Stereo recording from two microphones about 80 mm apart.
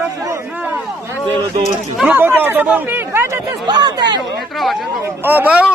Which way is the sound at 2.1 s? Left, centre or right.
Right.